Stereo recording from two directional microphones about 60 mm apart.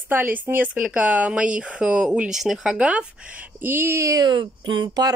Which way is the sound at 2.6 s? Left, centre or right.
Centre.